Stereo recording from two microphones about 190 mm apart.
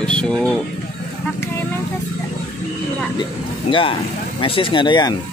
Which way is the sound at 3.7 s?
25° left (ahead or behind).